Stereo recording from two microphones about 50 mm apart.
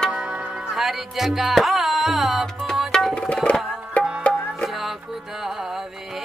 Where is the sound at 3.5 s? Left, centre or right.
Left.